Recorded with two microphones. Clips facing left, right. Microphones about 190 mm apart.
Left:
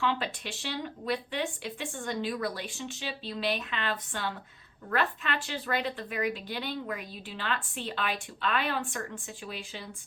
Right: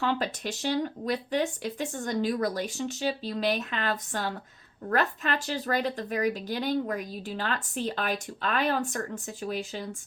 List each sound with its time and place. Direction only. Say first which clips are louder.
0.0 s a woman's voice: right 3 dB; 40° right (ahead or behind)